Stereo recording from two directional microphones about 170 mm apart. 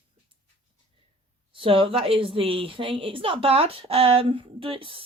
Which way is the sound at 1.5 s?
30° right (ahead or behind).